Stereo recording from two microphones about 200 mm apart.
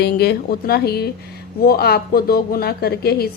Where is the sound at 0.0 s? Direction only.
50° left (ahead or behind).